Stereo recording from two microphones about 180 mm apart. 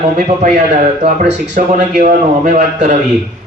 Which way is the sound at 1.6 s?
50° right (ahead or behind).